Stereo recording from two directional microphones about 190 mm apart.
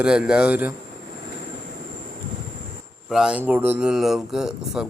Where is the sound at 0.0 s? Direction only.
5° right (ahead or behind).